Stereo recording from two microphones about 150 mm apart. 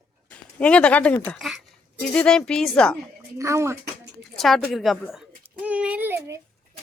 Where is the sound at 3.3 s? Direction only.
20° right (ahead or behind).